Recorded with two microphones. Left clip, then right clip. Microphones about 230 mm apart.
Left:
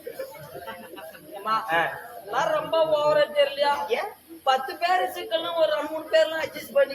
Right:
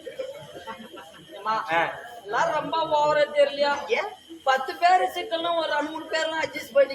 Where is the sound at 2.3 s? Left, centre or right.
Centre.